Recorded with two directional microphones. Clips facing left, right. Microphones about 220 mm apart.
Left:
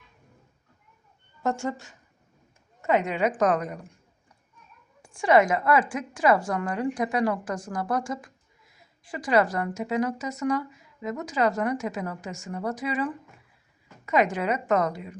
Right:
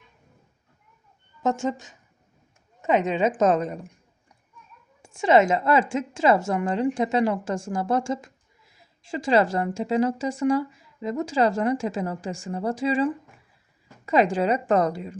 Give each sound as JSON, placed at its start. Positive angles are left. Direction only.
{"t": 1.4, "sound": "a woman's voice", "side_deg": -20}
{"t": 5.0, "sound": "a woman's voice", "side_deg": -25}